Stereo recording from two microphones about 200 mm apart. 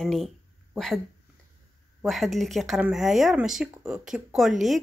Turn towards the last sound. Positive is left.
turn(degrees=0)  # may be behind; listen again after turning